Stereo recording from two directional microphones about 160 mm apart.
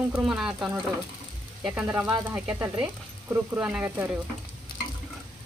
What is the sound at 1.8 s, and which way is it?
Speech, 15° right (ahead or behind).